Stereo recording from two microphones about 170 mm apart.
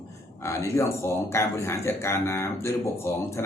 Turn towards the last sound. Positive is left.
turn(degrees=15)  # may be behind; listen again after turning